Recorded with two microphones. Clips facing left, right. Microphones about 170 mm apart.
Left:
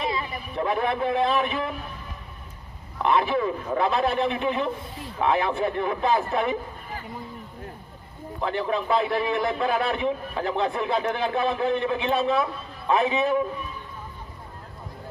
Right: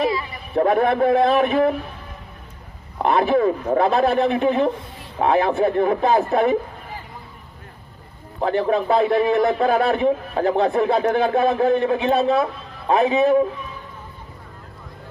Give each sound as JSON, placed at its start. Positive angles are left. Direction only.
{"t": 0.5, "sound": "a man's voice", "side_deg": -45}
{"t": 3.0, "sound": "a man's voice", "side_deg": -45}
{"t": 8.4, "sound": "a man's voice", "side_deg": -40}